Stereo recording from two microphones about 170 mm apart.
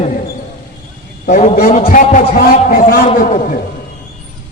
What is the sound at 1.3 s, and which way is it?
A man's voice, 40° left (ahead or behind).